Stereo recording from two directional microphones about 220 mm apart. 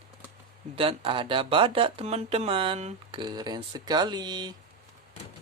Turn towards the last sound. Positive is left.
turn(degrees=-20)  # may be behind; listen again after turning